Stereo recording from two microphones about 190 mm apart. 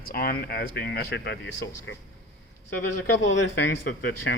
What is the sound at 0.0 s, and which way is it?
Speech, 50° left (ahead or behind).